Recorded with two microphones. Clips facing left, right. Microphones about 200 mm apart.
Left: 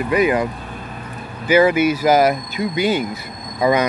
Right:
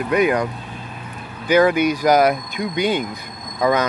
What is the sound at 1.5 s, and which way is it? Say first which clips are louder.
Speech: left 1 dB; 5° left (ahead or behind).